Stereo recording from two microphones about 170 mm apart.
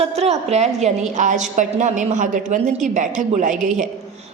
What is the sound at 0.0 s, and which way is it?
A woman's voice, 40° right (ahead or behind).